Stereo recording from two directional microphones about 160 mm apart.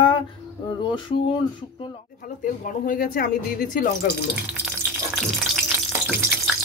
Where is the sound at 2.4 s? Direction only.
55° left (ahead or behind).